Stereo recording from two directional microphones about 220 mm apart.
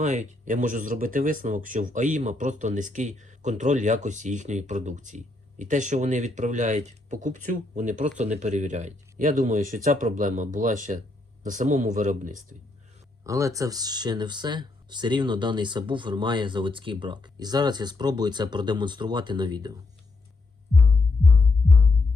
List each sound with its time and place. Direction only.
0.0 s speech: 30° right (ahead or behind)
13.2 s speech: 15° right (ahead or behind)